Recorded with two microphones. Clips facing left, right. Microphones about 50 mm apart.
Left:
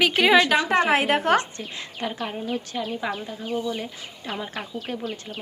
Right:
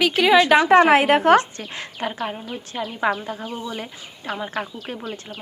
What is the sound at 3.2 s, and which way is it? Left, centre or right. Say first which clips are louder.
Speech: right 4 dB; right.